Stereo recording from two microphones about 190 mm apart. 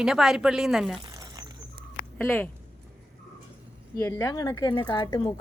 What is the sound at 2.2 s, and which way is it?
Speech, 10° left (ahead or behind).